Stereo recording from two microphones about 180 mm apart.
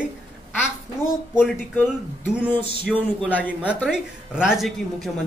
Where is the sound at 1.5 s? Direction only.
10° left (ahead or behind).